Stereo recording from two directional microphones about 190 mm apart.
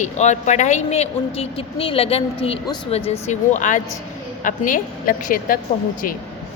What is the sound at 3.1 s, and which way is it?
A woman's voice, 40° left (ahead or behind).